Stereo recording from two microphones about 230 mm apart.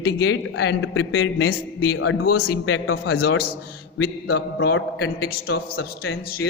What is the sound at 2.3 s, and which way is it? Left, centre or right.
Speech, left.